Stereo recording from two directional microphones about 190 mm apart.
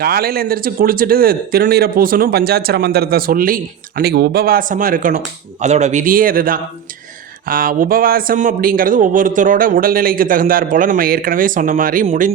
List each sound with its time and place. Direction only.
0.0 s speech: 55° right (ahead or behind)